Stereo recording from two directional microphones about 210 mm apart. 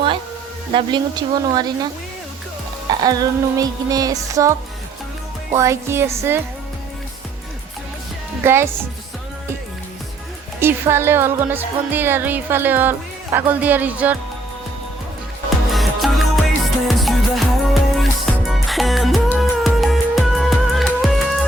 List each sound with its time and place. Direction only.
0.7 s speech: 20° right (ahead or behind)
3.0 s speech: 20° right (ahead or behind)
8.4 s speech: 10° right (ahead or behind)
10.6 s speech: 10° right (ahead or behind)
15.7 s music: centre (ahead or behind)